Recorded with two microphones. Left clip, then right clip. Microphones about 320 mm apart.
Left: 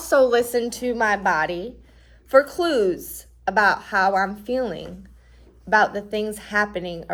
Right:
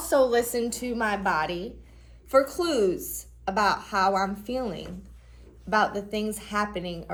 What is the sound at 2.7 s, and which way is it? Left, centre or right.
Speech, left.